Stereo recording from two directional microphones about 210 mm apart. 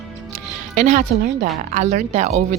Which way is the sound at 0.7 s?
35° right (ahead or behind).